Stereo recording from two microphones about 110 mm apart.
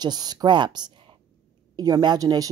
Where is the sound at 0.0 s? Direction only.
40° right (ahead or behind).